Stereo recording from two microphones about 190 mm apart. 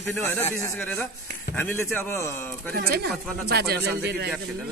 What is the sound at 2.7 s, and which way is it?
Speech, 60° right (ahead or behind).